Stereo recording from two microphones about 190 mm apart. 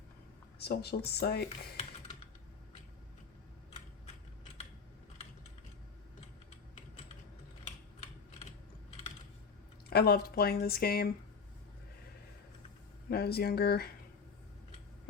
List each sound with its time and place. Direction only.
0.6 s speech: 55° left (ahead or behind)
1.7 s typing: 35° left (ahead or behind)
9.9 s speech: 55° left (ahead or behind)
13.1 s speech: 55° left (ahead or behind)